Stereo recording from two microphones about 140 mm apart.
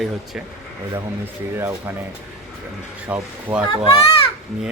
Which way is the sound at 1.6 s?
20° right (ahead or behind).